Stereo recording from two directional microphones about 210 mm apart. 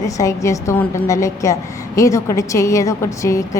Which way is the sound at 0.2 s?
15° left (ahead or behind).